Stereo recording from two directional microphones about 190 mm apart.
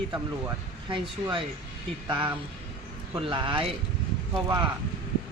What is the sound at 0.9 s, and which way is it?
Speech, 25° right (ahead or behind).